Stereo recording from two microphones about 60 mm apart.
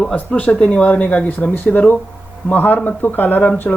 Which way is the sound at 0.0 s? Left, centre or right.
Centre.